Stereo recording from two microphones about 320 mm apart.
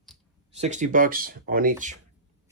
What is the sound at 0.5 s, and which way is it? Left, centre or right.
Speech, right.